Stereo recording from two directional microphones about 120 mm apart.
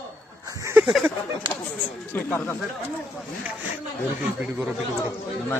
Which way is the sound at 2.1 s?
20° left (ahead or behind).